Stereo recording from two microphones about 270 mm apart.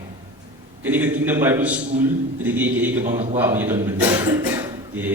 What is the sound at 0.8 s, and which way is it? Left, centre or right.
A man's voice, centre.